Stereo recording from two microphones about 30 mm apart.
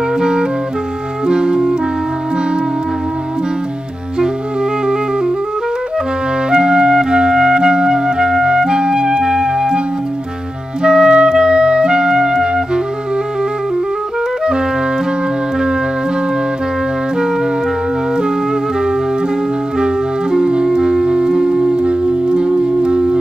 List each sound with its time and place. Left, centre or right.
0.2 s music: right
1.2 s clarinet: right
6.5 s clarinet: right
10.8 s clarinet: right
18.1 s music: right